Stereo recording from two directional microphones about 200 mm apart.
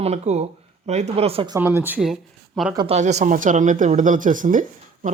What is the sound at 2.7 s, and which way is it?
Speech, 30° right (ahead or behind).